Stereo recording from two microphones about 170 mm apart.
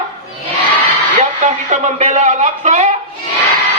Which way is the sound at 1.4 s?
45° right (ahead or behind).